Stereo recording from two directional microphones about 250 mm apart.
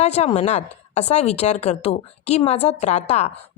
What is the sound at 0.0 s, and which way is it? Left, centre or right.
Speech, left.